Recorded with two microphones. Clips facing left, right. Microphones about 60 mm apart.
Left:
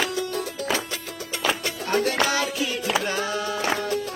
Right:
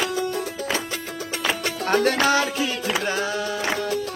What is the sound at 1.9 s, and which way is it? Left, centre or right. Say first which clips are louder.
Music: right 3 dB; right.